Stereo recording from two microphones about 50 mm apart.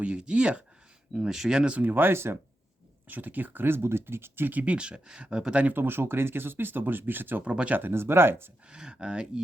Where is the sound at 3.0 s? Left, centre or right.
Right.